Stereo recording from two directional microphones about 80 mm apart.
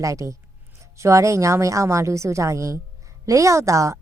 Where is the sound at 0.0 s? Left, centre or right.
Right.